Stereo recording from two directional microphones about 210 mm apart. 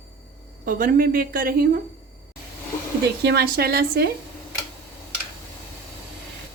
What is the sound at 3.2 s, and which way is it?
Speech, 50° right (ahead or behind).